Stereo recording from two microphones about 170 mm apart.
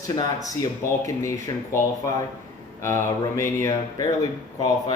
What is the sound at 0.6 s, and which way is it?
Speech, 15° left (ahead or behind).